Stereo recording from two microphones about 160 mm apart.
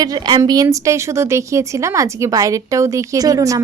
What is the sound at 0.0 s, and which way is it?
Speech, 25° right (ahead or behind).